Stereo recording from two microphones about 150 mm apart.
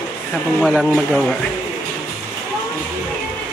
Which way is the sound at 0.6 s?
Centre (ahead or behind).